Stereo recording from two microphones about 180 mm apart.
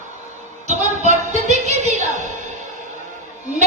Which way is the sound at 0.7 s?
40° right (ahead or behind).